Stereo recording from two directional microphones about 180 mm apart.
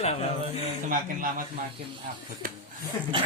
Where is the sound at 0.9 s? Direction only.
50° right (ahead or behind).